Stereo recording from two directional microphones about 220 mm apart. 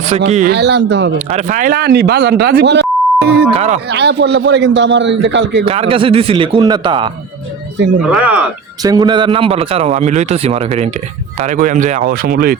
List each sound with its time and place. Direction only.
0.1 s speech: 30° right (ahead or behind)
0.4 s a man's voice: 50° right (ahead or behind)
1.3 s a man's voice: 35° right (ahead or behind); by 5.6 s 50° right (ahead or behind)
5.6 s a man's voice: 25° right (ahead or behind)
8.1 s speech: 5° right (ahead or behind)
8.8 s a man's voice: 15° right (ahead or behind); by 12.5 s 40° right (ahead or behind)